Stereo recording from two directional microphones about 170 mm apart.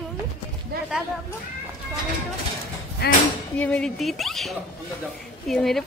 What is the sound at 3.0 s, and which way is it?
Speech, 70° left (ahead or behind).